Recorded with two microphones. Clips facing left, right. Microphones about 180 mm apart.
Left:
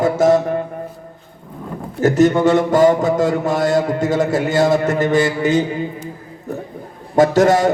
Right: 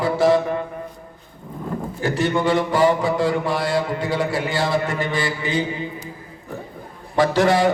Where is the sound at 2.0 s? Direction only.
45° left (ahead or behind).